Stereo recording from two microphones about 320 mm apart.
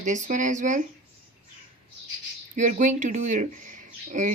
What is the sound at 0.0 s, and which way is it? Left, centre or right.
Speech, right.